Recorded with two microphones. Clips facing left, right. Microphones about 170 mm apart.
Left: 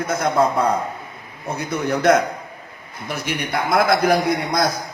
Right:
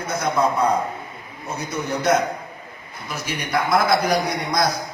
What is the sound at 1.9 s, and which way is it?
Speech, 60° left (ahead or behind).